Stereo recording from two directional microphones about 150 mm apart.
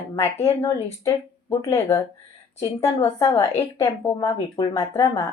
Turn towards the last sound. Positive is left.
turn(degrees=25)  # may be behind; listen again after turning